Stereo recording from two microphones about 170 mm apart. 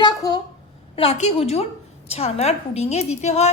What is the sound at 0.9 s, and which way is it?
A woman's voice, 40° left (ahead or behind).